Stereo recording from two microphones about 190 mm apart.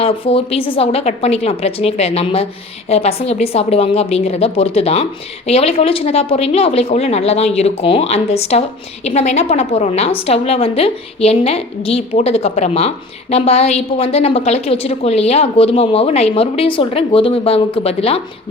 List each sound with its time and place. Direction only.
0.0 s a woman's voice: 30° left (ahead or behind)